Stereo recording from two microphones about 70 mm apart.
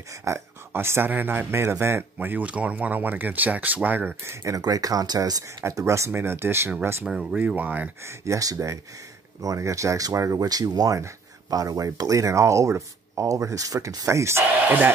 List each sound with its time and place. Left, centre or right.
0.2 s speech: right
2.1 s speech: right
4.2 s speech: right
4.6 s speech: right
5.6 s speech: right
7.1 s speech: centre
7.3 s speech: right
8.0 s speech: right